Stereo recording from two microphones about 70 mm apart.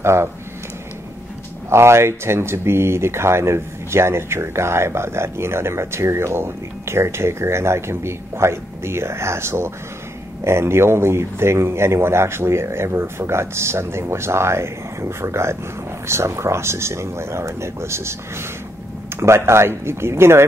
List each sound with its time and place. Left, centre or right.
0.0 s speech: right
1.7 s speech: right
19.1 s speech: right